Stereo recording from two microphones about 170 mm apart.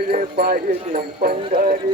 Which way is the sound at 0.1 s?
65° right (ahead or behind).